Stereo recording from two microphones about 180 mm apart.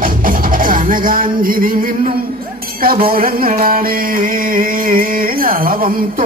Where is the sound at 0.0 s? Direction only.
50° right (ahead or behind).